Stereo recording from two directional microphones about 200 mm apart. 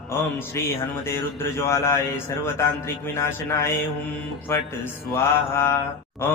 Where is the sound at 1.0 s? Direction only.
15° left (ahead or behind).